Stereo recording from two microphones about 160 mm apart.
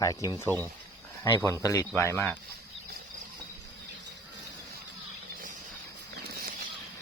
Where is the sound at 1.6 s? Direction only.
20° left (ahead or behind).